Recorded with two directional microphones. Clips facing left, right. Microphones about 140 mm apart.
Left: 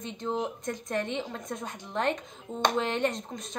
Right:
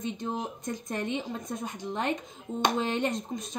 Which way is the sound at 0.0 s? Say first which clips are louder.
Left 1 dB; 10° right (ahead or behind).